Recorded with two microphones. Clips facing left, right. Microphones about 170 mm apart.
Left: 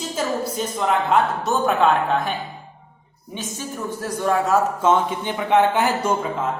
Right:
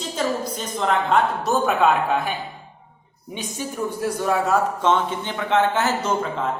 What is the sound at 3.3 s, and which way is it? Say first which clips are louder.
Speech: right 1 dB; 15° right (ahead or behind).